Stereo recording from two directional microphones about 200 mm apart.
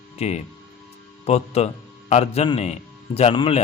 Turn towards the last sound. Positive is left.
turn(degrees=25)  # may be behind; listen again after turning